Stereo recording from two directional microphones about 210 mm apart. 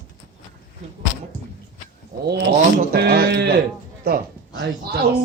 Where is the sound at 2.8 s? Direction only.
50° right (ahead or behind).